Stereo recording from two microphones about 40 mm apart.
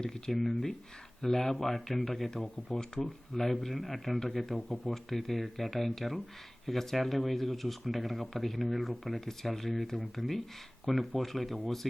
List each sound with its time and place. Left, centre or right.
0.0 s speech: centre
0.3 s speech: centre